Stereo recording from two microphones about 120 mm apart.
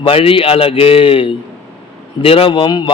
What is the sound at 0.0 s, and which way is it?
A man's voice, 50° left (ahead or behind).